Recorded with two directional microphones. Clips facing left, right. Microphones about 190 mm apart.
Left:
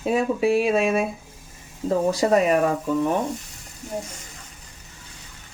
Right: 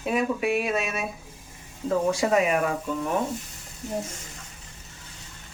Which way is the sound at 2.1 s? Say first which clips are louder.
Left 4 dB; 35° left (ahead or behind).